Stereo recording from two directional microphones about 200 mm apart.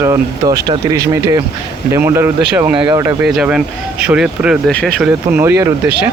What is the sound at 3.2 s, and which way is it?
Speech, 5° right (ahead or behind).